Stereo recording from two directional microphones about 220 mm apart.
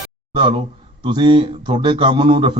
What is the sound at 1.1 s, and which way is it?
A man's voice, 20° right (ahead or behind).